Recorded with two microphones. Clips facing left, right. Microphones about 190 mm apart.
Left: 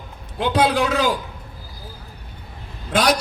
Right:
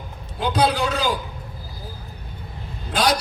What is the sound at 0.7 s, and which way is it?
Speech, 85° left.